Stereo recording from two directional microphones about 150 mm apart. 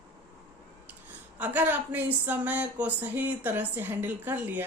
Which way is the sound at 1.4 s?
10° right (ahead or behind).